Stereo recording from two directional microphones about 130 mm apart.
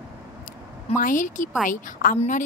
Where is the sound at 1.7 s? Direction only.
90° left.